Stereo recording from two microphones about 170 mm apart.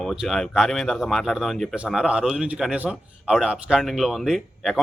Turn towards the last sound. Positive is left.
turn(degrees=0)  # may be behind; listen again after turning